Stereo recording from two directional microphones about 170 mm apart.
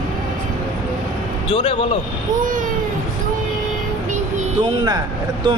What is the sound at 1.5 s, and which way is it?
Speech, 35° left (ahead or behind).